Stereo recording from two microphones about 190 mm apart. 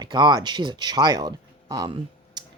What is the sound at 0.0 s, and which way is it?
Speech, 25° right (ahead or behind).